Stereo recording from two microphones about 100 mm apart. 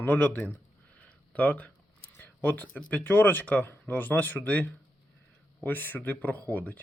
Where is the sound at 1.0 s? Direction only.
15° left (ahead or behind).